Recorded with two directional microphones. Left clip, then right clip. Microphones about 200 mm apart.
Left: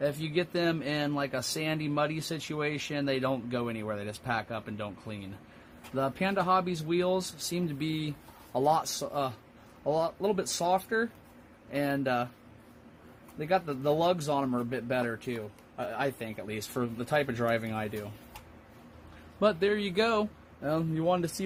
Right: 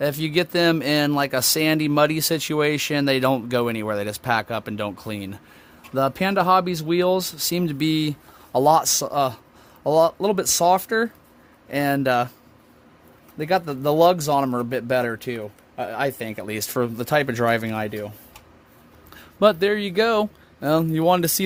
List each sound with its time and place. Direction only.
0.0 s speech: 55° right (ahead or behind)
13.4 s speech: 55° right (ahead or behind)
19.4 s speech: 35° right (ahead or behind)
20.6 s speech: 45° right (ahead or behind)